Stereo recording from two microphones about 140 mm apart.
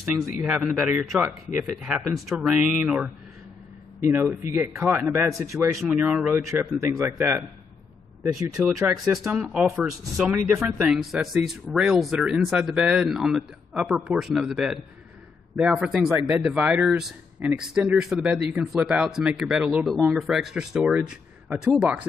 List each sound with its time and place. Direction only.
0.0 s a man's voice: 20° right (ahead or behind)
0.4 s a man's voice: 5° right (ahead or behind); by 5.7 s 20° right (ahead or behind)
5.8 s a man's voice: 10° right (ahead or behind)
8.5 s a man's voice: 5° right (ahead or behind)